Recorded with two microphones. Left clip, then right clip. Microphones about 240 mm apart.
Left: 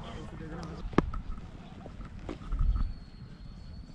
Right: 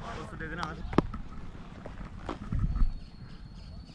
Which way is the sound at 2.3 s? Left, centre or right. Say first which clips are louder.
Right 4 dB; centre.